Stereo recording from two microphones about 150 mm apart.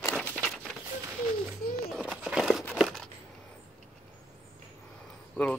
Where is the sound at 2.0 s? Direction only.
5° right (ahead or behind).